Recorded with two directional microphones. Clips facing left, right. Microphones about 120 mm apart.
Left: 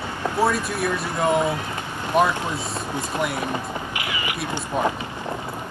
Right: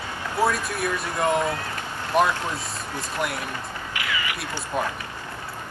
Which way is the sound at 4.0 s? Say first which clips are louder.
Right 2 dB; 20° left (ahead or behind).